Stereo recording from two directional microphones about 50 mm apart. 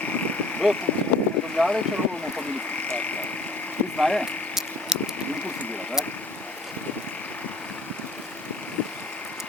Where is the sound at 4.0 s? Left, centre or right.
Centre.